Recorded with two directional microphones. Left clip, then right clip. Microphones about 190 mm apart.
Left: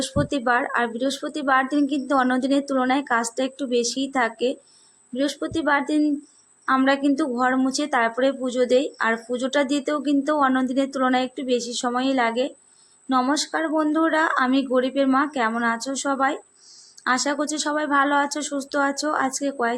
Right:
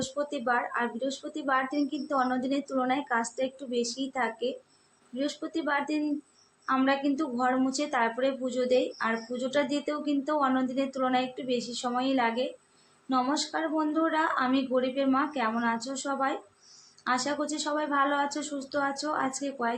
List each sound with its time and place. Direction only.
0.0 s a woman's voice: 55° left (ahead or behind)